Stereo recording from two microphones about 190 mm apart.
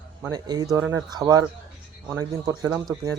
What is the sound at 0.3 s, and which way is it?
A man's voice, 20° right (ahead or behind).